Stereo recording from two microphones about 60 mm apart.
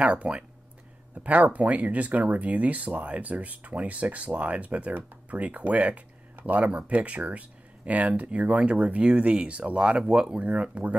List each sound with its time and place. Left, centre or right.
0.0 s speech: right